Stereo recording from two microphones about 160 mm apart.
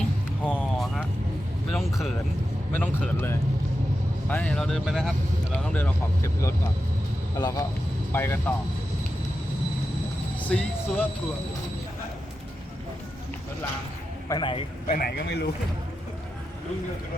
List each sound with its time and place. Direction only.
0.4 s vehicle: 5° left (ahead or behind)
2.7 s speech: 15° left (ahead or behind)
7.3 s speech: 25° left (ahead or behind)
10.5 s speech: 10° left (ahead or behind)
14.3 s speech: 30° left (ahead or behind)
14.8 s a man's voice: 75° left (ahead or behind)